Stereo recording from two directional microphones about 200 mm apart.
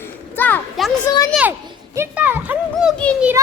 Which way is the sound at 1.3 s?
10° right (ahead or behind).